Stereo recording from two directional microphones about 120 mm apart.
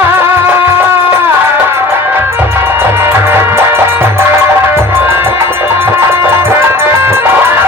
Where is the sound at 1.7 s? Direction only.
20° right (ahead or behind).